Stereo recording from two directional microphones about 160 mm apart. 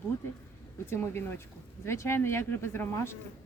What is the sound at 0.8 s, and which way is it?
Speech, 15° left (ahead or behind).